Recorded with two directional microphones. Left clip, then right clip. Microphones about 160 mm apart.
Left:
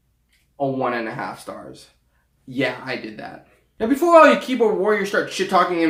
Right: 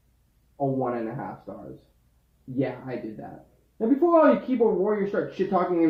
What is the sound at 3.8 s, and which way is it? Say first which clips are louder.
Speech: left 7 dB; 40° left (ahead or behind).